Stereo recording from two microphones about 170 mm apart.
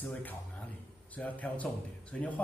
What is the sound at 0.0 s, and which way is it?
A man's voice, 10° left (ahead or behind).